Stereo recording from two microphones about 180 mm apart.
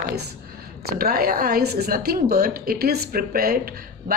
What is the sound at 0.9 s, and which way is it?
A woman's voice, 55° right (ahead or behind).